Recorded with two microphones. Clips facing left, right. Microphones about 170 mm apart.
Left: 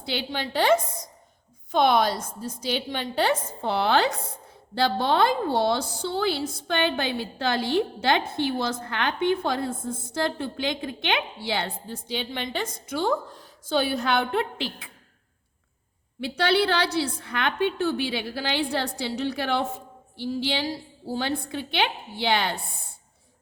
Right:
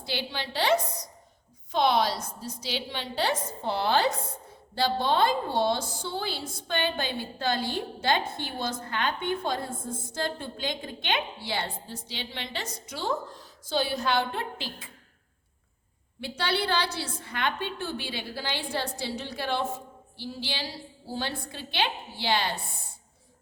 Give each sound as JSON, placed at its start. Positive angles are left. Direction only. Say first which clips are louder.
{"t": 0.1, "sound": "a woman's voice", "louder": "left 4 dB", "side_deg": 55}
{"t": 16.2, "sound": "a woman's voice", "louder": "left 7 dB", "side_deg": 70}